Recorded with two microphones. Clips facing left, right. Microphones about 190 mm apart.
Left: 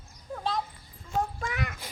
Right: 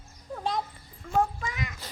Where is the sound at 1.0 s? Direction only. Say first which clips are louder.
Right 4 dB; 60° right (ahead or behind).